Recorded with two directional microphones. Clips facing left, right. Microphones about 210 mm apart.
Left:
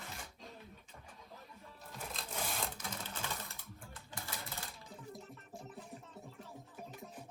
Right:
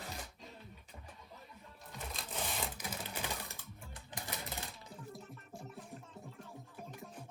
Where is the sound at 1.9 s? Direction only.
Centre (ahead or behind).